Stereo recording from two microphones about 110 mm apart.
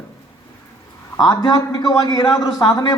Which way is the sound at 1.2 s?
40° left (ahead or behind).